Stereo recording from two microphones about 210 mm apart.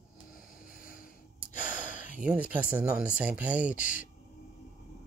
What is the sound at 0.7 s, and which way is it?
Gasp, 45° left (ahead or behind).